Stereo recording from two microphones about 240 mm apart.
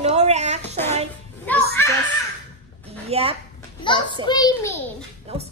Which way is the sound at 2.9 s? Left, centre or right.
Right.